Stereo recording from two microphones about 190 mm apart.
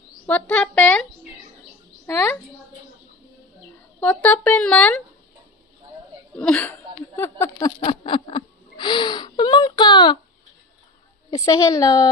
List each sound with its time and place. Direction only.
0.3 s speech: 5° left (ahead or behind)
2.0 s a child's voice: 10° left (ahead or behind)
4.0 s speech: 10° left (ahead or behind)
6.3 s a sound: 5° left (ahead or behind); by 10.1 s 20° left (ahead or behind)
11.2 s a woman's voice: 20° left (ahead or behind)